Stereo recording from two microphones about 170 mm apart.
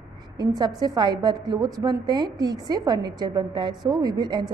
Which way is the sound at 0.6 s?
25° right (ahead or behind).